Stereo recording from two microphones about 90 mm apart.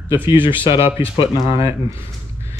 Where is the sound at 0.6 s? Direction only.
70° left (ahead or behind).